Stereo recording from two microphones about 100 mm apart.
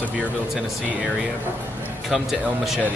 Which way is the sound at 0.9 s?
10° right (ahead or behind).